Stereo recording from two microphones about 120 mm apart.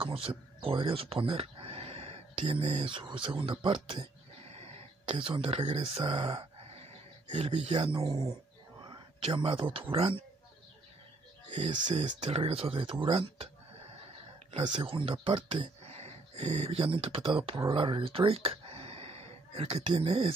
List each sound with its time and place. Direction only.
0.0 s speech: 50° right (ahead or behind)
7.7 s speech: 50° right (ahead or behind)
8.1 s speech: 30° right (ahead or behind)
8.8 s speech: 40° right (ahead or behind)
11.4 s speech: 85° right
12.3 s speech: 55° right (ahead or behind)
13.0 s a sound: 50° right (ahead or behind)
14.6 s speech: 40° right (ahead or behind)